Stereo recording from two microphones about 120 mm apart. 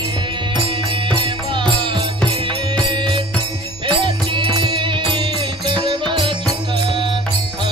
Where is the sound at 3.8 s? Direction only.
45° right (ahead or behind).